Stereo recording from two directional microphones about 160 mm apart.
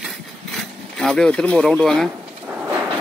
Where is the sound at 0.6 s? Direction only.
5° left (ahead or behind).